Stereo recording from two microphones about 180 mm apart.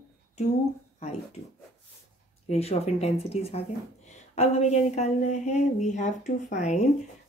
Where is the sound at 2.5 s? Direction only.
35° left (ahead or behind).